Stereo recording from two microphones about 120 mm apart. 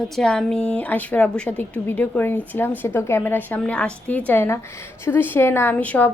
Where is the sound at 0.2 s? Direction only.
5° left (ahead or behind).